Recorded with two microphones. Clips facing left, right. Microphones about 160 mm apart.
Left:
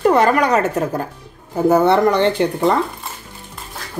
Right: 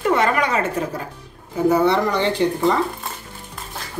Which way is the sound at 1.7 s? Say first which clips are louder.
Left 4 dB; 60° left (ahead or behind).